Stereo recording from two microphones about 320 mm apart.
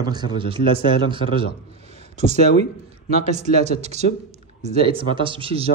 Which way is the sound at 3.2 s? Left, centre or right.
Right.